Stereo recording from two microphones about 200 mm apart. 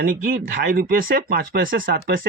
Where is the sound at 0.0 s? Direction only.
45° right (ahead or behind).